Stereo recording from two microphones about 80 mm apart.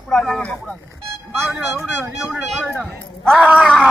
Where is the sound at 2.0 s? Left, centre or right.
Centre.